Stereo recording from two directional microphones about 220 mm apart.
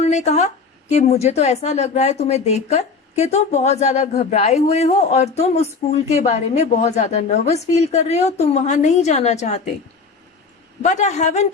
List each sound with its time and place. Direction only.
0.0 s a woman's voice: 30° left (ahead or behind)
10.8 s a woman's voice: 30° left (ahead or behind)